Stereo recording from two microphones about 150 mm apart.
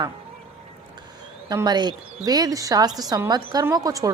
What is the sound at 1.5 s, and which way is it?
A woman's voice, 25° right (ahead or behind).